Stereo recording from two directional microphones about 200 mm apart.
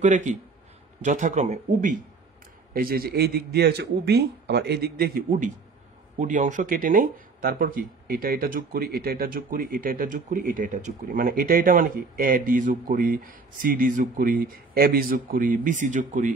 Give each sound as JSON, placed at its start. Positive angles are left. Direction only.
{"t": 0.0, "sound": "speech", "side_deg": -40}
{"t": 2.7, "sound": "speech", "side_deg": -50}